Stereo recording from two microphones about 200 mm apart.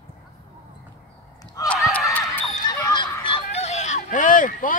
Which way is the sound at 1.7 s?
5° left (ahead or behind).